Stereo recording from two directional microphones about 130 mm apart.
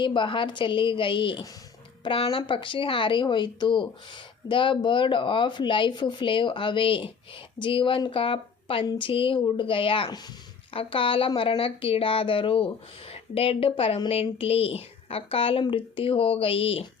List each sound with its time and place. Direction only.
0.0 s speech: 40° left (ahead or behind)